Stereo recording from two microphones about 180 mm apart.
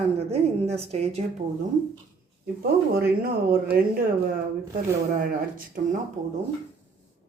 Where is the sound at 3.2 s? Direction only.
55° right (ahead or behind).